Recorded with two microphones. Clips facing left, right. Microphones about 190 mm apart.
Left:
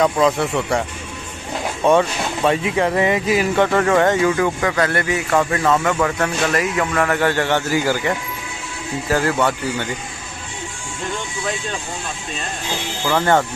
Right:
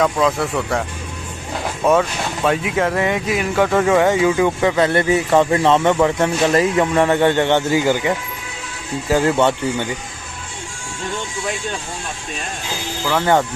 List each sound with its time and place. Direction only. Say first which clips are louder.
0.0 s speech: left 1 dB; centre (ahead or behind); by 8.1 s 20° right (ahead or behind)
9.1 s speech: right 3 dB; 20° right (ahead or behind)
13.0 s speech: even; 5° right (ahead or behind)